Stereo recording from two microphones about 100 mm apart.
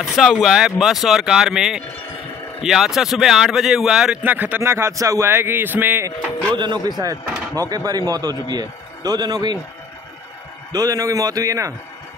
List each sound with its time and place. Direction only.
0.0 s speech: centre (ahead or behind)
4.2 s a man's voice: 20° right (ahead or behind)
6.5 s a man's voice: 50° right (ahead or behind)
10.7 s a man's voice: 35° right (ahead or behind)